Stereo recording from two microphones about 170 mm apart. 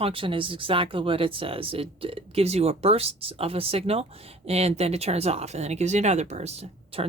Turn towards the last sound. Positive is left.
turn(degrees=-35)  # may be behind; listen again after turning